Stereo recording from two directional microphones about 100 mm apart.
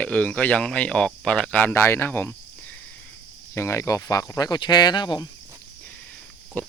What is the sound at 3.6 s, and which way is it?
Speech, 30° left (ahead or behind).